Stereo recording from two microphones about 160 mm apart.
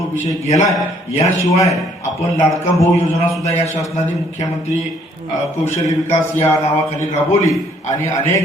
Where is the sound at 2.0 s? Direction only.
45° left (ahead or behind).